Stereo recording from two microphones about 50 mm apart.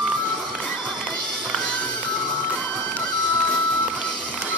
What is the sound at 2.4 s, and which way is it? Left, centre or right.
Music, left.